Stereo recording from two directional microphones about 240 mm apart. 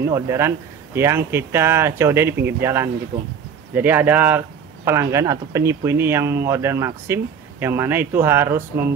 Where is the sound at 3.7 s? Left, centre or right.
Centre.